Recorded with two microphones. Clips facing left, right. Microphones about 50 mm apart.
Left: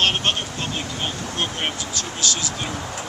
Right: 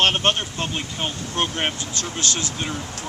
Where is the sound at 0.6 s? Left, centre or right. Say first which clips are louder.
Right 2 dB; right.